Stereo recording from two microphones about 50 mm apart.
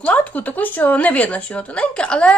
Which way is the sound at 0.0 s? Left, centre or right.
Left.